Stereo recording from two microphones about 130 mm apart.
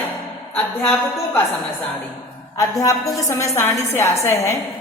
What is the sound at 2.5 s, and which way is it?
A woman's voice, 25° left (ahead or behind).